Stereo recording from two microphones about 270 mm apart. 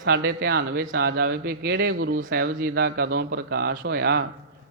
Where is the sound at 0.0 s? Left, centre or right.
Right.